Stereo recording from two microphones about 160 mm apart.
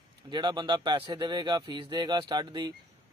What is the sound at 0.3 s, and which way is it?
Speech, 30° right (ahead or behind).